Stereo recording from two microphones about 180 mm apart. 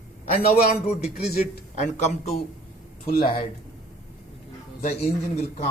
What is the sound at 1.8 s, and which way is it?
Speech, 40° left (ahead or behind).